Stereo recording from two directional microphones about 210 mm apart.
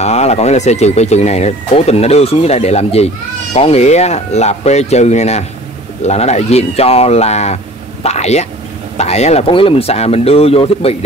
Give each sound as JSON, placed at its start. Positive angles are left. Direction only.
{"t": 0.0, "sound": "speech", "side_deg": 30}